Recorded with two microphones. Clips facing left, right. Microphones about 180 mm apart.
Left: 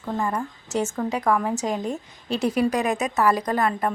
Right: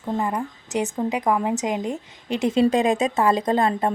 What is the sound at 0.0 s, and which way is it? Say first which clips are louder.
Speech: right 1 dB; 15° right (ahead or behind).